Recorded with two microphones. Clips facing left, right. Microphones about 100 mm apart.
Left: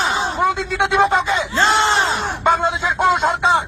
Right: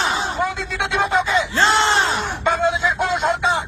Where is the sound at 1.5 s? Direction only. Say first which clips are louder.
Left 2 dB; 20° left (ahead or behind).